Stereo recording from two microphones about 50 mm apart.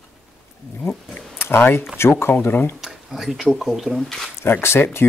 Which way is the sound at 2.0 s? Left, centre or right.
Left.